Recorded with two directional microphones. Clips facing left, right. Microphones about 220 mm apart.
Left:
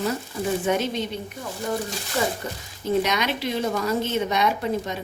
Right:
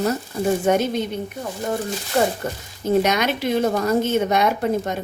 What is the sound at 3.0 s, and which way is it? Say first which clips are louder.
A woman's voice: right 4 dB; 50° right (ahead or behind).